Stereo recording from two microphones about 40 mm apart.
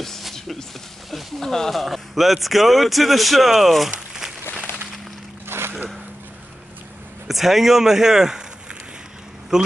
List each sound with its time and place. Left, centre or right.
0.2 s a sound: centre
1.4 s a man's voice: centre
5.5 s boat: right
7.2 s speech: centre